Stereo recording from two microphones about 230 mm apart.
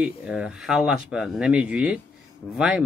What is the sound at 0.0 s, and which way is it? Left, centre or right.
Speech, centre.